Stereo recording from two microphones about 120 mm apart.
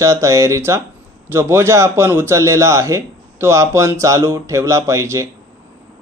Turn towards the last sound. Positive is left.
turn(degrees=-25)  # may be behind; listen again after turning